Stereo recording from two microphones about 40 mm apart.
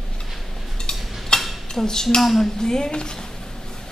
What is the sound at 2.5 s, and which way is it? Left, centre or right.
Dishes, centre.